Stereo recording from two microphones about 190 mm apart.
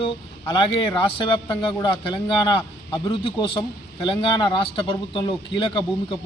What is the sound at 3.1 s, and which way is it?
A man's voice, 25° left (ahead or behind).